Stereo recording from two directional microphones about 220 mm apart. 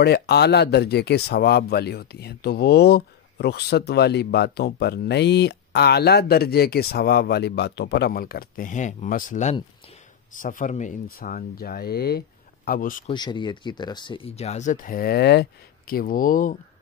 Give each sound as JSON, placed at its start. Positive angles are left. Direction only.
{"t": 0.0, "sound": "speech", "side_deg": 45}
{"t": 13.1, "sound": "speech", "side_deg": 20}